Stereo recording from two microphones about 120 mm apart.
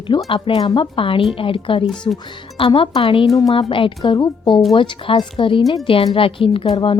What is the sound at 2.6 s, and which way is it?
A woman's voice, 45° left (ahead or behind).